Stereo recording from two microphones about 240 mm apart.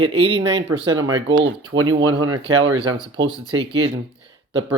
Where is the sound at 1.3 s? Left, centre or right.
Right.